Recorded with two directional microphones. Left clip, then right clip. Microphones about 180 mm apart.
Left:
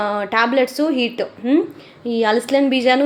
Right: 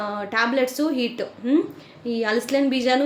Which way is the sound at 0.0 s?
20° left (ahead or behind).